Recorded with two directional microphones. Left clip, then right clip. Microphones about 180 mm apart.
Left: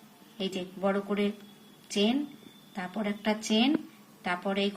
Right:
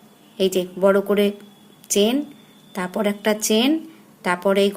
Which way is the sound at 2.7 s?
75° right (ahead or behind).